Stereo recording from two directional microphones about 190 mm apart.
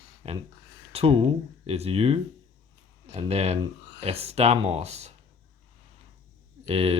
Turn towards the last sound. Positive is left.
turn(degrees=-30)  # may be behind; listen again after turning